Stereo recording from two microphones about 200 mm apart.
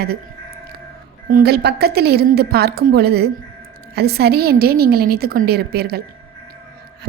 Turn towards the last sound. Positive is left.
turn(degrees=-50)  # may be behind; listen again after turning